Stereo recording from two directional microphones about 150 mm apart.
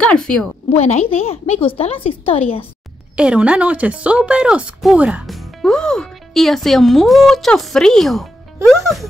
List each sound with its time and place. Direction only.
0.0 s speech: 5° left (ahead or behind)
0.7 s a woman's voice: 45° left (ahead or behind)
3.2 s speech: 5° right (ahead or behind)